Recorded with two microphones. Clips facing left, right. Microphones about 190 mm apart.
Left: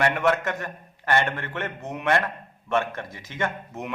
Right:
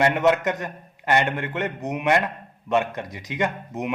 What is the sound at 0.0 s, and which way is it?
A man's voice, 20° right (ahead or behind).